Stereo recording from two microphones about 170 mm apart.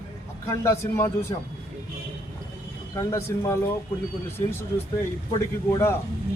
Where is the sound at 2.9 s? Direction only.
20° left (ahead or behind).